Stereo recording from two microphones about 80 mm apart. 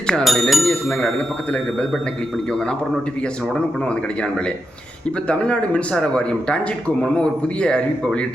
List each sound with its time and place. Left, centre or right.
0.1 s speech: centre
3.5 s speech: centre
5.3 s speech: centre